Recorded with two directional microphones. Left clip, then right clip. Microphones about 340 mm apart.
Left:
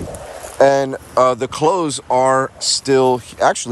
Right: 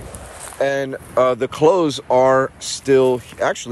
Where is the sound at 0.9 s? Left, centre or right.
Centre.